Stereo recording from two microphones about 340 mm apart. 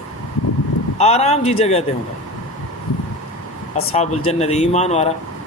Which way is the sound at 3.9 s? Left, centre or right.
Centre.